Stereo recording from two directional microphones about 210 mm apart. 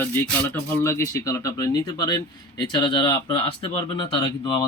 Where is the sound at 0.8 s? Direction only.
10° left (ahead or behind).